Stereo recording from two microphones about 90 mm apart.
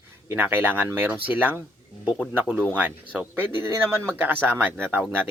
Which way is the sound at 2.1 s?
10° right (ahead or behind).